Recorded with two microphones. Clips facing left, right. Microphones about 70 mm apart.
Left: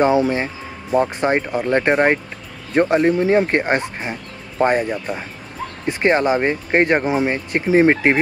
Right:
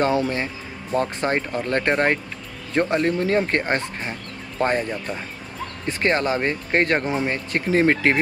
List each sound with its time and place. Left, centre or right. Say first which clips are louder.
0.0 s speech: left 5 dB; centre